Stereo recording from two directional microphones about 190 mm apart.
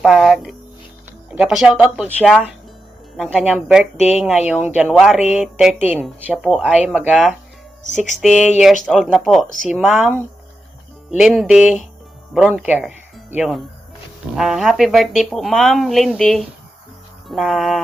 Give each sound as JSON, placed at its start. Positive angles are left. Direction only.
{"t": 0.0, "sound": "a woman's voice", "side_deg": 0}